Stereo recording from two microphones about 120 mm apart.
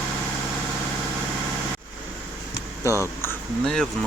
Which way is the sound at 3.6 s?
5° left (ahead or behind).